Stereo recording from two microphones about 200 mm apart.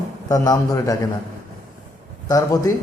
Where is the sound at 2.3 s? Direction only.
15° left (ahead or behind).